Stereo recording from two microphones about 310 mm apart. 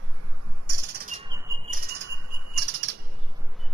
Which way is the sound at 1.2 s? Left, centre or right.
Centre.